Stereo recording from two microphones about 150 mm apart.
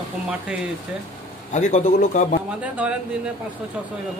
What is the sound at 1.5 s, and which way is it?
Speech, 55° left (ahead or behind).